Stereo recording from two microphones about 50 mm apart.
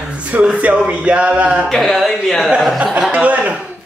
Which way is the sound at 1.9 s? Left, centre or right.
Centre.